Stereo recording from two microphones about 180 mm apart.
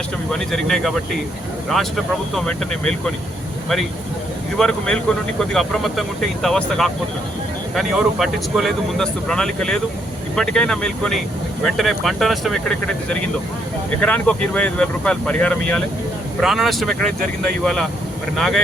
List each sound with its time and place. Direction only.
0.3 s speech: centre (ahead or behind)
2.3 s speech: 5° left (ahead or behind)
4.5 s speech: 5° left (ahead or behind)